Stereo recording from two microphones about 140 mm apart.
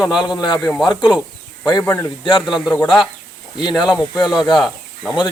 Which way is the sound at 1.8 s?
20° left (ahead or behind).